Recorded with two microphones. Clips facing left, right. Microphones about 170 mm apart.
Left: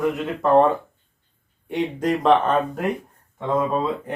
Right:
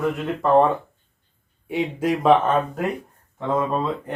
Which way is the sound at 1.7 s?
5° right (ahead or behind).